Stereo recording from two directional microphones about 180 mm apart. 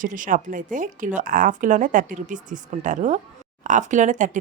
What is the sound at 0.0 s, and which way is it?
A woman's voice, 50° right (ahead or behind).